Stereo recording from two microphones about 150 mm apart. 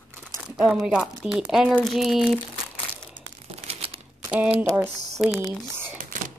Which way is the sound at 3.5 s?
40° right (ahead or behind).